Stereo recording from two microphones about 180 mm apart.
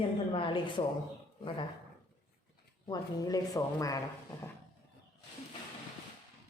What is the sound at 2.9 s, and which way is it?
Speech, 20° left (ahead or behind).